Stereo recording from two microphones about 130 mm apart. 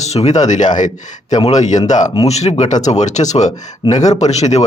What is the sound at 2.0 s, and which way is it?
Speech, 30° left (ahead or behind).